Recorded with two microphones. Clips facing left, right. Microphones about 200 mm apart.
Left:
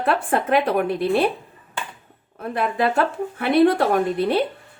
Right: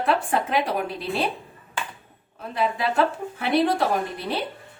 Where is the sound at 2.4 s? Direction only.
55° left (ahead or behind).